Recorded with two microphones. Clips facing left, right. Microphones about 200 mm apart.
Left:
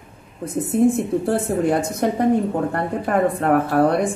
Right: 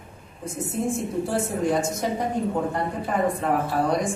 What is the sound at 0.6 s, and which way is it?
A woman's voice, 60° left (ahead or behind).